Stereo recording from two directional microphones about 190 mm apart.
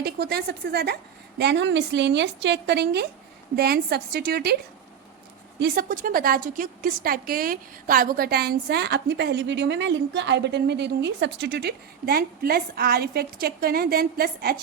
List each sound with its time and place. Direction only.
0.0 s a woman's voice: 60° right (ahead or behind)
5.5 s a woman's voice: 55° right (ahead or behind)